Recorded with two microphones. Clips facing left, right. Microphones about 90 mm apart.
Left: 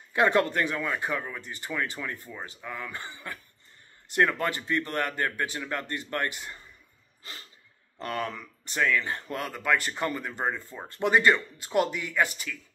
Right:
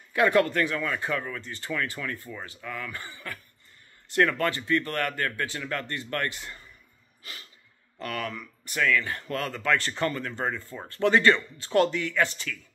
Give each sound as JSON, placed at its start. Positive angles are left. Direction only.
{"t": 0.1, "sound": "speech", "side_deg": 25}
{"t": 8.0, "sound": "speech", "side_deg": 30}